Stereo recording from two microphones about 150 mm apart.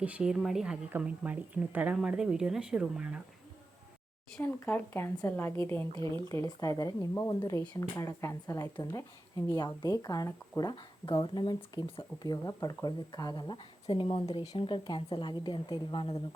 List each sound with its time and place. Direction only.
0.0 s a woman's voice: 5° right (ahead or behind)
4.4 s a woman's voice: 15° left (ahead or behind)
5.9 s speech: 30° right (ahead or behind)
6.2 s a woman's voice: 20° left (ahead or behind)